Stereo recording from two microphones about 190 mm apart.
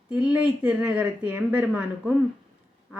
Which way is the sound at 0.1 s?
5° right (ahead or behind).